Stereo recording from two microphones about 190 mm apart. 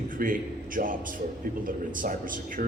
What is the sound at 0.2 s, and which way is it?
A man's voice, 45° right (ahead or behind).